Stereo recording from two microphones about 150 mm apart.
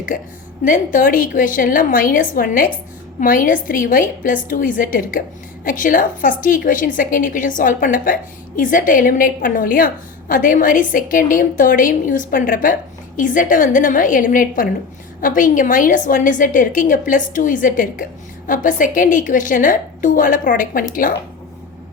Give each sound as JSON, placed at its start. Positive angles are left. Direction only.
{"t": 0.1, "sound": "a woman's voice", "side_deg": 65}